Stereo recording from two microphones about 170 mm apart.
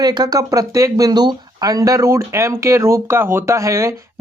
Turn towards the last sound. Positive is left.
turn(degrees=-20)  # may be behind; listen again after turning